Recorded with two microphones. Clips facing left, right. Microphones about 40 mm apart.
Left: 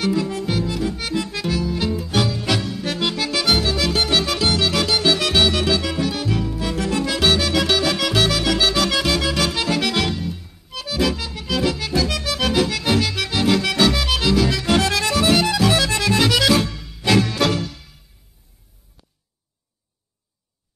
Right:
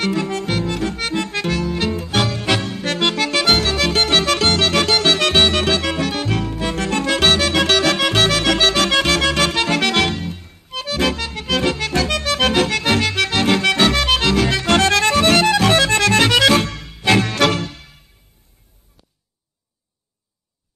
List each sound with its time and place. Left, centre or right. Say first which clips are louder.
0.0 s music: right 1 dB; right
2.4 s music: right 3 dB; right
12.1 s accordion: right 4 dB; right
13.5 s accordion: even; right
16.0 s music: right 4 dB; right
16.3 s music: right 3 dB; right
16.6 s music: right 2 dB; right
16.9 s music: right 2 dB; right